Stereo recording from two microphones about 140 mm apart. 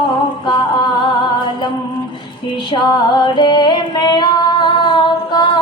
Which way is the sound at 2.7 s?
35° left (ahead or behind).